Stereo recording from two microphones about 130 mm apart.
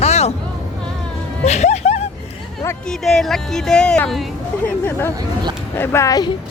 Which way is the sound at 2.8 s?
5° left (ahead or behind).